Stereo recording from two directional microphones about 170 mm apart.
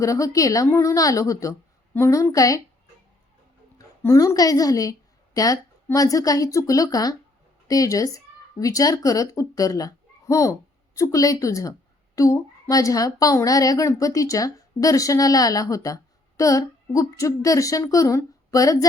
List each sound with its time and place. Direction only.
0.0 s a woman's voice: 20° left (ahead or behind)
3.8 s a woman's voice: 20° left (ahead or behind)